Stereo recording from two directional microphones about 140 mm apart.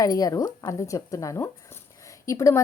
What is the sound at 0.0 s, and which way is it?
A woman's voice, 25° left (ahead or behind).